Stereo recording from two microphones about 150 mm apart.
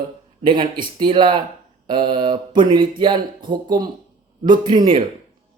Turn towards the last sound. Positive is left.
turn(degrees=-30)  # may be behind; listen again after turning